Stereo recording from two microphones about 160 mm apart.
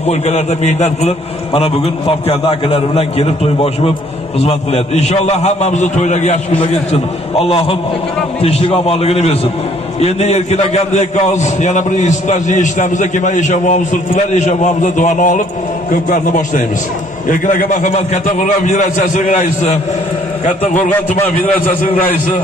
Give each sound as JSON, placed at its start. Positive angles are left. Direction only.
{"t": 0.0, "sound": "a man's voice", "side_deg": 45}